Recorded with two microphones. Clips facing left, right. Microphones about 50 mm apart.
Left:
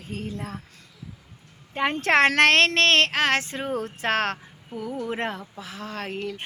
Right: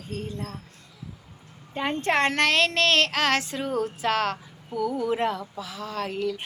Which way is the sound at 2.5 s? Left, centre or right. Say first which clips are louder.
Left 3 dB; left.